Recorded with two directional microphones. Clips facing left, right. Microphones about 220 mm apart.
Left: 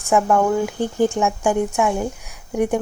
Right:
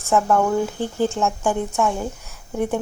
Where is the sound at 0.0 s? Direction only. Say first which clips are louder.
Left 1 dB; 15° left (ahead or behind).